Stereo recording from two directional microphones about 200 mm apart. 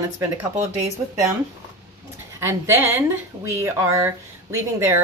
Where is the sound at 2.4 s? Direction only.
10° right (ahead or behind).